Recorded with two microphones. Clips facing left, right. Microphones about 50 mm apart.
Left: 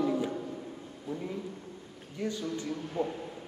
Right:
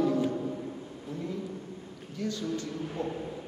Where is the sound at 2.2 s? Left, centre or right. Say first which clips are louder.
Right 1 dB; centre.